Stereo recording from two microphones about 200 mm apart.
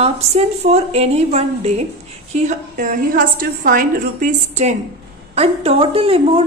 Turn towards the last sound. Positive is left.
turn(degrees=-30)  # may be behind; listen again after turning